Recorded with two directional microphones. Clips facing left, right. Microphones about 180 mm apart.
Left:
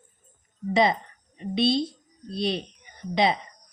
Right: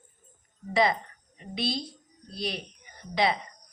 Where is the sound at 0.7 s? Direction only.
20° left (ahead or behind).